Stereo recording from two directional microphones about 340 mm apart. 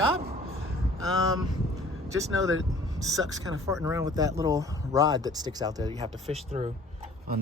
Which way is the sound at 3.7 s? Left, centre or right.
Centre.